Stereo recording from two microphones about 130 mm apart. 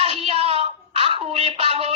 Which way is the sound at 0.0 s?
50° right (ahead or behind).